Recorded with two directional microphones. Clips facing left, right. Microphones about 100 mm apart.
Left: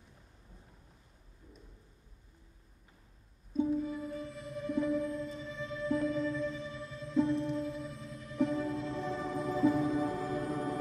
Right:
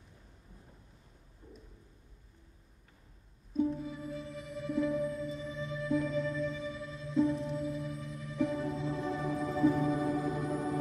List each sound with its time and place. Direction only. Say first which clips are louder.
3.7 s music: left 4 dB; centre (ahead or behind)